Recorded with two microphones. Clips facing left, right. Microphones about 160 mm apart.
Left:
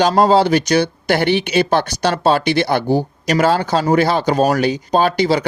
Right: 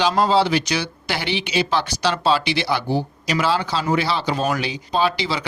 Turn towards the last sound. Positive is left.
turn(degrees=45)  # may be behind; listen again after turning